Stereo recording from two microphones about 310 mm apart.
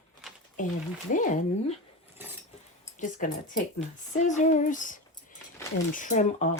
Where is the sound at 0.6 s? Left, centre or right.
Left.